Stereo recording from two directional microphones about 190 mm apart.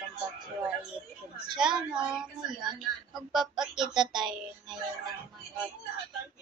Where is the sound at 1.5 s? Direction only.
5° right (ahead or behind).